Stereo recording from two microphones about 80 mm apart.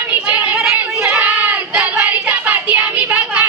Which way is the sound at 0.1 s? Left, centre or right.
Right.